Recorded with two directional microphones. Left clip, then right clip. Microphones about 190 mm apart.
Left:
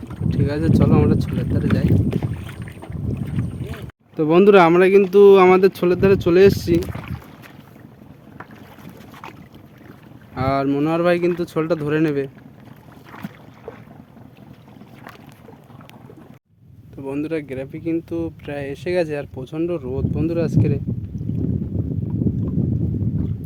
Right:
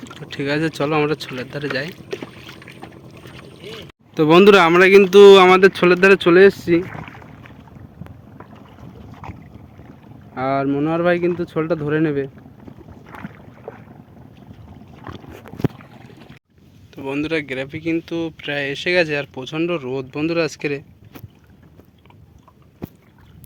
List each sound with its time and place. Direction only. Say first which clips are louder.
0.3 s speech: right 1 dB; centre (ahead or behind)
4.1 s speech: right 2 dB; centre (ahead or behind)
5.5 s speech: right 4 dB; 10° left (ahead or behind)
6.9 s boat: right 1 dB; 20° right (ahead or behind)
10.3 s speech: even; 15° left (ahead or behind)
13.1 s boat: even; 15° right (ahead or behind)
17.0 s speech: right 3 dB; centre (ahead or behind)